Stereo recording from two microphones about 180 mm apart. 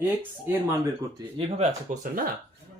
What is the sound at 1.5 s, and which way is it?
Speech, 45° right (ahead or behind).